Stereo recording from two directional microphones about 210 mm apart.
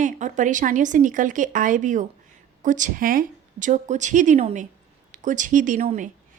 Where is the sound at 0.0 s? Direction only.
35° right (ahead or behind).